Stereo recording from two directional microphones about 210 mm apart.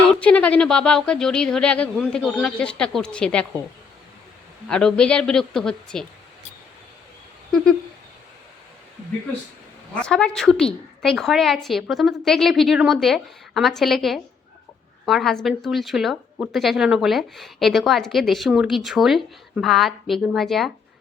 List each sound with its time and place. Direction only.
0.2 s a woman's voice: 5° left (ahead or behind)
4.7 s a woman's voice: 5° left (ahead or behind)
7.5 s owl: 5° left (ahead or behind)
9.9 s a woman's voice: 5° left (ahead or behind)